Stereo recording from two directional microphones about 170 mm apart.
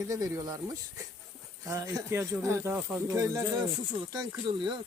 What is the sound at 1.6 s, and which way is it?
Speech, 20° right (ahead or behind).